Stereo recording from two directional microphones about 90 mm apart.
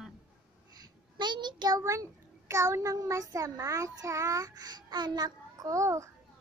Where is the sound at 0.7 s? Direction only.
55° right (ahead or behind).